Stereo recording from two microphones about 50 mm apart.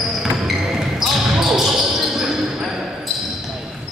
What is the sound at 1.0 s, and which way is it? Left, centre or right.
Basketball bounce, centre.